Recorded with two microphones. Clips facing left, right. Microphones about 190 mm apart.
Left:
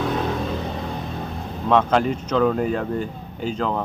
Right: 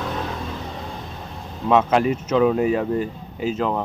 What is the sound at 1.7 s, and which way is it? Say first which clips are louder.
Speech: right 1 dB; 5° right (ahead or behind).